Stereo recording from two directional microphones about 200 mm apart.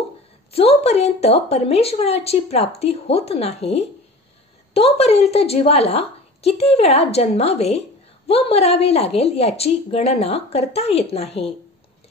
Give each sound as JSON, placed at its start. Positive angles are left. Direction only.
{"t": 0.5, "sound": "speech", "side_deg": 30}